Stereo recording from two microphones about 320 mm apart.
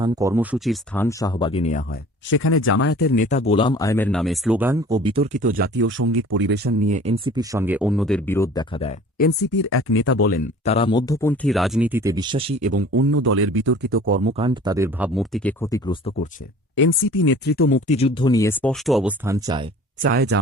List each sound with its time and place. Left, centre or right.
0.0 s speech: centre; by 2.0 s left
2.3 s speech: left; by 12.8 s right
12.9 s speech: right; by 16.3 s centre
16.7 s speech: left; by 19.6 s centre
20.0 s speech: right